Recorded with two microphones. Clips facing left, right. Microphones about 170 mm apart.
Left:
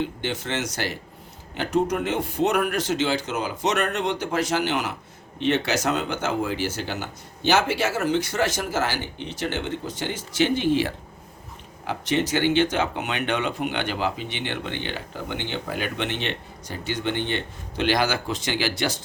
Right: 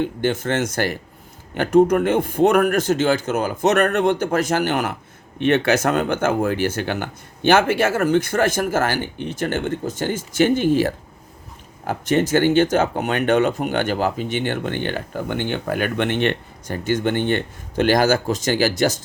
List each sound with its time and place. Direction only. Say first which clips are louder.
0.0 s speech: right 7 dB; 50° right (ahead or behind)